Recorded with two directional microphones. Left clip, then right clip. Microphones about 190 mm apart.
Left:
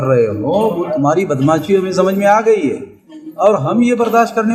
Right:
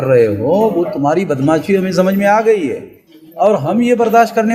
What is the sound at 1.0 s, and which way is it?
A man's voice, 35° right (ahead or behind).